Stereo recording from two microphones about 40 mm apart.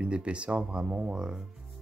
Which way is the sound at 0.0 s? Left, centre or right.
Right.